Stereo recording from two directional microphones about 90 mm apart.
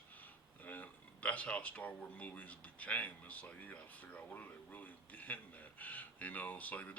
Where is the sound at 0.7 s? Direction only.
15° left (ahead or behind).